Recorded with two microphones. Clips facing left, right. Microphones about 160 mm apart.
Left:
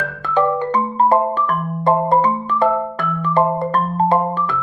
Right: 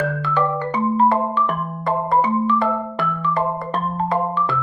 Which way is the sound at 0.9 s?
40° left (ahead or behind).